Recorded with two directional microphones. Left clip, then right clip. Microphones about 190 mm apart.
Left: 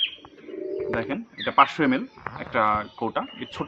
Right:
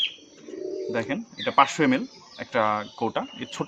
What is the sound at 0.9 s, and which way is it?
Speech, 35° right (ahead or behind).